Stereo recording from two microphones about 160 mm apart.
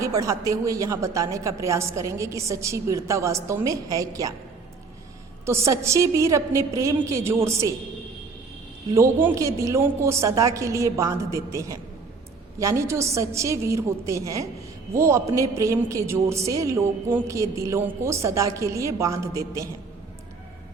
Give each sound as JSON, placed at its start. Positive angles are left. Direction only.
{"t": 0.0, "sound": "a woman's voice", "side_deg": -20}
{"t": 5.5, "sound": "a woman's voice", "side_deg": -20}
{"t": 9.0, "sound": "a woman's voice", "side_deg": -15}